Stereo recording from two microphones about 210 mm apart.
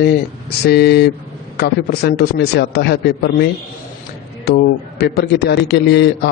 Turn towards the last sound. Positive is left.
turn(degrees=50)  # may be behind; listen again after turning